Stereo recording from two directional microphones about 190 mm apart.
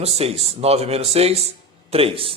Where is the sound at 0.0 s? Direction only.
30° right (ahead or behind).